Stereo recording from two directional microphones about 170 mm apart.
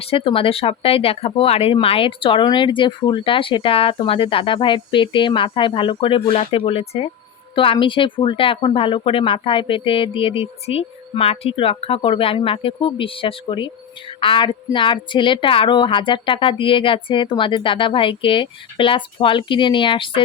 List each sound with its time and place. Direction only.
0.0 s speech: 35° left (ahead or behind)